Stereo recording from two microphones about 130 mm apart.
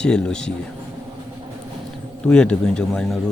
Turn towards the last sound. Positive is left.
turn(degrees=5)  # may be behind; listen again after turning